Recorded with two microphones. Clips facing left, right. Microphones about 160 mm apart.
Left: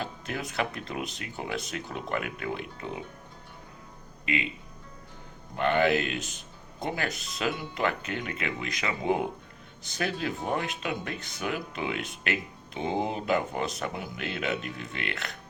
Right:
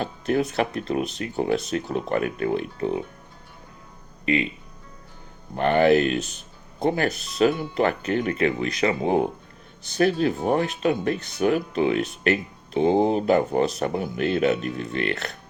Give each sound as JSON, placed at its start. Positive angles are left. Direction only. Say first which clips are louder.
{"t": 0.0, "sound": "speech", "louder": "right 11 dB", "side_deg": -30}
{"t": 5.5, "sound": "speech", "louder": "right 7 dB", "side_deg": -35}